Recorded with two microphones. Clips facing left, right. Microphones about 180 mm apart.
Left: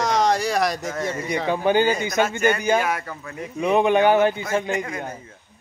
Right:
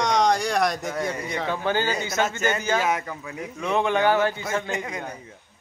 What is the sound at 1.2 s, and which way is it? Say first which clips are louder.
A man's voice: left 5 dB; 15° left (ahead or behind).